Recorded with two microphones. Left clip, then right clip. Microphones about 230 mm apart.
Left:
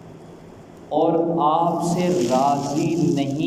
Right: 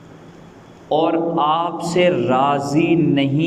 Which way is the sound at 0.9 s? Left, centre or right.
Right.